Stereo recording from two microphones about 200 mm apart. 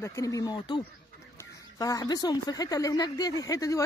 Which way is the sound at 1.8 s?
20° left (ahead or behind).